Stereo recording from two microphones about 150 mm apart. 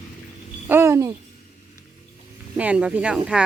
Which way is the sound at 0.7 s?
15° right (ahead or behind).